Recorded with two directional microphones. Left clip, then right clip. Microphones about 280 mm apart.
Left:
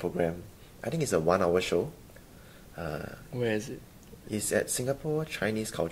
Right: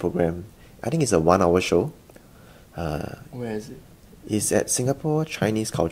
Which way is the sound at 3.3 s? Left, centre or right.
Left.